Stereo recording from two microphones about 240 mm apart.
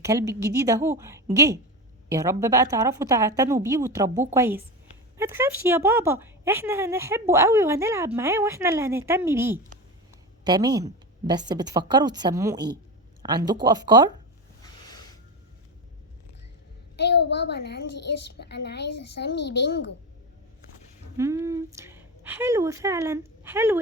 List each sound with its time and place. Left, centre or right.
0.0 s a woman's voice: centre
14.6 s a sound: centre
17.0 s a child's voice: left
21.2 s speech: centre